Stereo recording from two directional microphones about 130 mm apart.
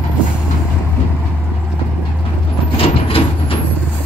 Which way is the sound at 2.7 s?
45° left (ahead or behind).